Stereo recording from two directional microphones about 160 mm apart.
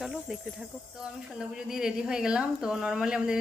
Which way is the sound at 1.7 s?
5° right (ahead or behind).